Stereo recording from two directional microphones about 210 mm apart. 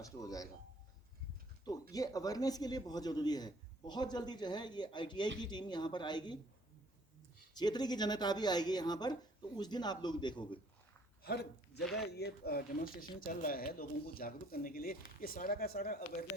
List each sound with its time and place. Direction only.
0.0 s speech: 15° left (ahead or behind)
1.9 s a man's voice: 15° left (ahead or behind)
7.5 s a man's voice: 20° left (ahead or behind)
11.2 s speech: 50° left (ahead or behind)